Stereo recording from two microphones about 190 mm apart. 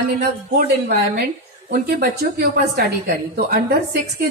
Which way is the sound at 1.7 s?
50° right (ahead or behind).